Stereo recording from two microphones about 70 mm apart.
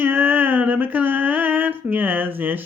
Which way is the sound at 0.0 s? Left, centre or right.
Right.